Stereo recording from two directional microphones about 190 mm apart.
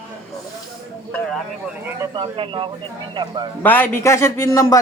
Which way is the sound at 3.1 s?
20° right (ahead or behind).